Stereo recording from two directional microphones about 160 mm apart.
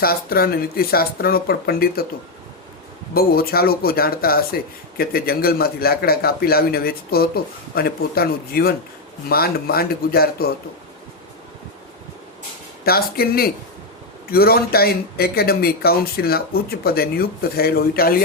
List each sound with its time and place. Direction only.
0.0 s speech: 70° left (ahead or behind)
3.2 s speech: 70° left (ahead or behind)
12.8 s speech: 70° left (ahead or behind)